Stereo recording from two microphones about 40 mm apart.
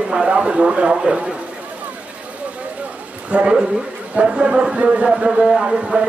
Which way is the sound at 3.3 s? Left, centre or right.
Right.